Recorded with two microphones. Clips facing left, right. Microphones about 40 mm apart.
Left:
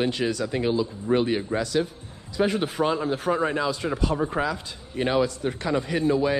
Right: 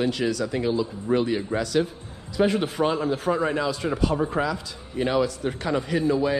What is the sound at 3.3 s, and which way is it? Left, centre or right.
Speech, centre.